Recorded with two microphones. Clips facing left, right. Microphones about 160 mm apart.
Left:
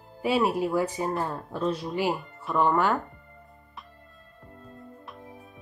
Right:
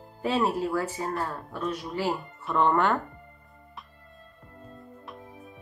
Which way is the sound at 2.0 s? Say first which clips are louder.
Even; 15° left (ahead or behind).